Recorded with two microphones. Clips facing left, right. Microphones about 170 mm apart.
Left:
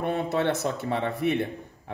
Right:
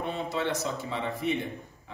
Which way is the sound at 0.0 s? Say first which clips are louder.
Left 5 dB; 60° left (ahead or behind).